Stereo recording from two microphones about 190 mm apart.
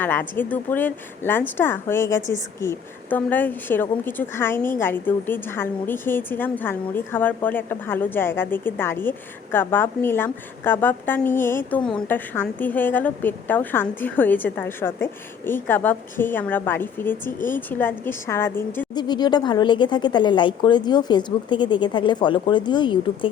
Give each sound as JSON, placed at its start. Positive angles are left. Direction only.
{"t": 0.0, "sound": "a woman's voice", "side_deg": 10}
{"t": 18.9, "sound": "speech", "side_deg": 20}